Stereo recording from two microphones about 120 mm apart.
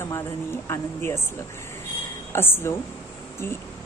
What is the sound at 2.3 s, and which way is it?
Speech, 20° left (ahead or behind).